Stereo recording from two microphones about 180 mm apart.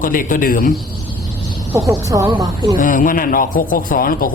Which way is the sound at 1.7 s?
15° right (ahead or behind).